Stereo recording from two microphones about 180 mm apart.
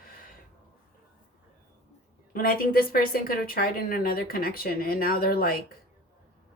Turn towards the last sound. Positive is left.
turn(degrees=55)  # may be behind; listen again after turning